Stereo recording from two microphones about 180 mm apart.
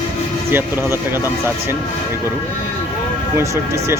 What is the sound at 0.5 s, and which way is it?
Speech, 10° right (ahead or behind).